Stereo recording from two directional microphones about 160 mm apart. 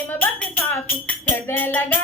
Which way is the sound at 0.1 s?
10° left (ahead or behind).